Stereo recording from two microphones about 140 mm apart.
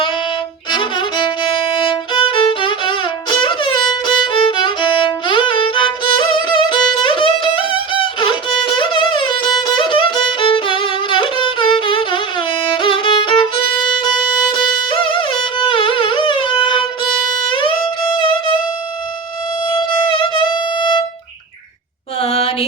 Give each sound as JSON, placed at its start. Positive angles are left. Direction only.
{"t": 0.7, "sound": "violin", "side_deg": 35}
{"t": 2.1, "sound": "music", "side_deg": 40}
{"t": 9.6, "sound": "violin", "side_deg": 35}
{"t": 14.5, "sound": "music", "side_deg": 35}
{"t": 19.7, "sound": "music", "side_deg": 35}
{"t": 22.2, "sound": "mantra", "side_deg": 50}